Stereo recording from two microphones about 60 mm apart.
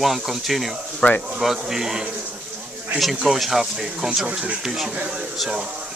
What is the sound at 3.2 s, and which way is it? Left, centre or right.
Speech, centre.